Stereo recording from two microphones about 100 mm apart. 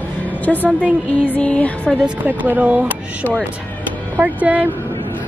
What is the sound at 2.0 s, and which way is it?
Speech, 15° right (ahead or behind).